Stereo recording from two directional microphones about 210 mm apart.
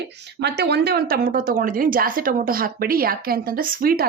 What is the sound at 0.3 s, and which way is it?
A woman's voice, 50° right (ahead or behind).